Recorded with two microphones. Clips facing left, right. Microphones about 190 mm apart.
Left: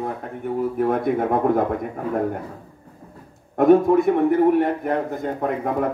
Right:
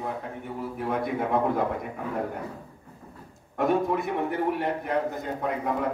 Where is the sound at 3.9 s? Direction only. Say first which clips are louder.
Left 11 dB; 55° left (ahead or behind).